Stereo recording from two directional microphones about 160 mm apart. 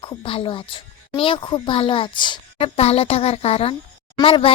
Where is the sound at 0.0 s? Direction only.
30° left (ahead or behind).